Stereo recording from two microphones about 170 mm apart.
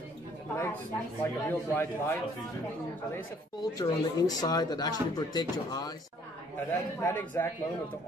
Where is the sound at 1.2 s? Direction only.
15° left (ahead or behind).